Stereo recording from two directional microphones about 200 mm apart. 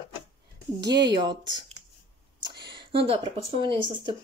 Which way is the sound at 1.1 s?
20° right (ahead or behind).